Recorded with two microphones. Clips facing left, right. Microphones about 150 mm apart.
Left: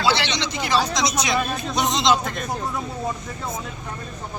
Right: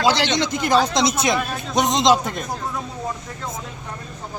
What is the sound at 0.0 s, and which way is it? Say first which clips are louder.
Speech: right 3 dB; 45° right (ahead or behind).